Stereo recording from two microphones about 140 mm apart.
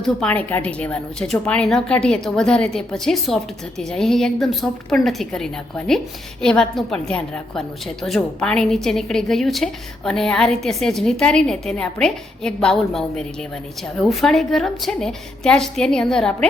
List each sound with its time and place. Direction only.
0.0 s a woman's voice: 10° left (ahead or behind)